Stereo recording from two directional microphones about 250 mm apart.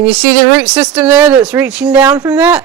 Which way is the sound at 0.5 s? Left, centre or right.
Centre.